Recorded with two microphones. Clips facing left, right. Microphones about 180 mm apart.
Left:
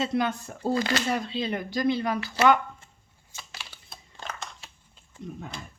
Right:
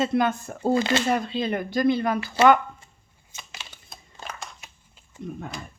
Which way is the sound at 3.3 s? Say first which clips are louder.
Right 1 dB; 20° right (ahead or behind).